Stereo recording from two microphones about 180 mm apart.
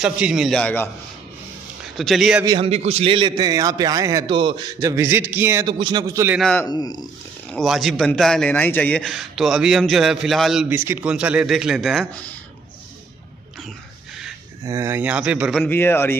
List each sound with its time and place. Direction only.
0.0 s a man's voice: 5° right (ahead or behind)
2.0 s a man's voice: centre (ahead or behind)
2.4 s a man's voice: 30° right (ahead or behind)
4.7 s speech: 15° right (ahead or behind)
5.7 s a man's voice: 25° right (ahead or behind)
6.7 s speech: 20° left (ahead or behind)
7.5 s a man's voice: centre (ahead or behind)
14.6 s speech: 15° right (ahead or behind)
15.6 s speech: 10° left (ahead or behind)